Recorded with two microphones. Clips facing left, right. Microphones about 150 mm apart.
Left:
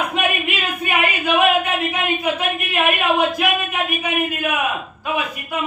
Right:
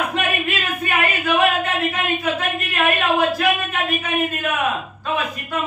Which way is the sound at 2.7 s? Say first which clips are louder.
Even; 15° left (ahead or behind).